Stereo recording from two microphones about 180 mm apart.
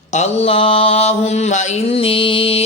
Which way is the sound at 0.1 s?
35° left (ahead or behind).